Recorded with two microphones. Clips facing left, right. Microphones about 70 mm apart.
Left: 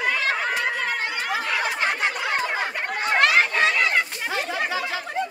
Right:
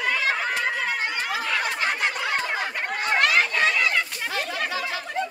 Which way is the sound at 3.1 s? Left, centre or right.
Left.